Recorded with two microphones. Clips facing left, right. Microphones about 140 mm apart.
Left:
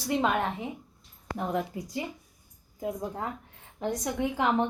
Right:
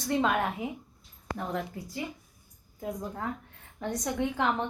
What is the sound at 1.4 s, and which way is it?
Speech, 20° left (ahead or behind).